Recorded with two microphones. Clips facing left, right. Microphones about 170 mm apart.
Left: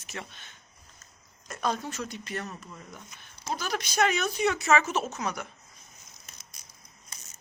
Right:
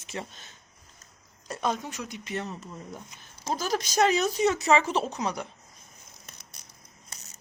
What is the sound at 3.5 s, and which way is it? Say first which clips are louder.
Speech: right 3 dB; 40° right (ahead or behind).